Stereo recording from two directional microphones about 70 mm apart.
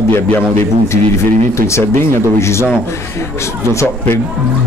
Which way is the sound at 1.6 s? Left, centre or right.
Left.